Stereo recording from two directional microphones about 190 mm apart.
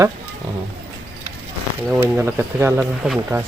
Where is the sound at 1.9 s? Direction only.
10° right (ahead or behind).